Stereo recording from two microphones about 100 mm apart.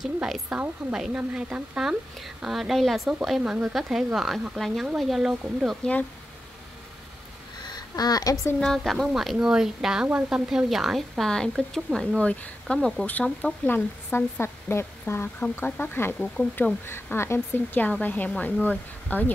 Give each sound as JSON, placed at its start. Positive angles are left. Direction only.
{"t": 0.0, "sound": "a woman's voice", "side_deg": -5}
{"t": 5.3, "sound": "a woman's voice", "side_deg": -15}
{"t": 7.6, "sound": "a sound", "side_deg": 45}
{"t": 8.5, "sound": "speech", "side_deg": 5}
{"t": 12.2, "sound": "a woman's voice", "side_deg": 10}